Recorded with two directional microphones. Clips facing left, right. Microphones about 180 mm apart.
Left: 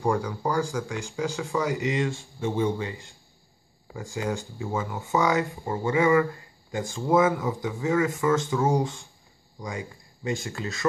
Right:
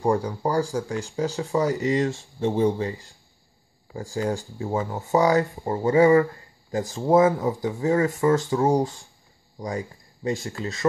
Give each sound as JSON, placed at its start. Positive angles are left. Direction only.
{"t": 0.1, "sound": "speech", "side_deg": -30}